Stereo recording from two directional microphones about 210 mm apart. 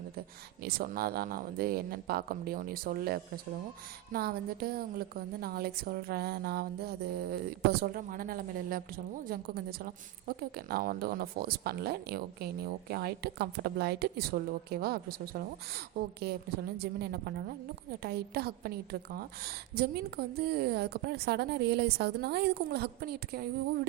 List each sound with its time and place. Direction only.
0.6 s a woman's voice: 45° right (ahead or behind)